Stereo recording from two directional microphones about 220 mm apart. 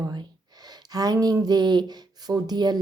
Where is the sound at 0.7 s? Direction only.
15° right (ahead or behind).